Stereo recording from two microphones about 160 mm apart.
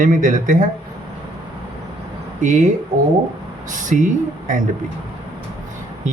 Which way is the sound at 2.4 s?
50° right (ahead or behind).